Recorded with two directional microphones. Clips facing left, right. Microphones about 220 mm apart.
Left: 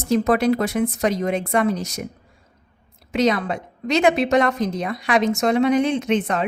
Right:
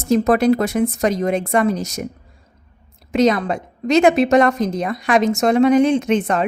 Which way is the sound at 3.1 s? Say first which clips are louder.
Right 4 dB; 45° right (ahead or behind).